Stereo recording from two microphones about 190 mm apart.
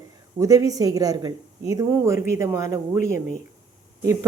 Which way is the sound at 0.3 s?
20° right (ahead or behind).